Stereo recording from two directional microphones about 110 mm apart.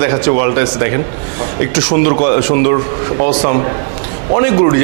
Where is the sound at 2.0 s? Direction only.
15° right (ahead or behind).